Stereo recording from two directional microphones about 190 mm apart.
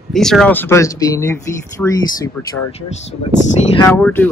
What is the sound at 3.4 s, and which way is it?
Speech, 35° left (ahead or behind).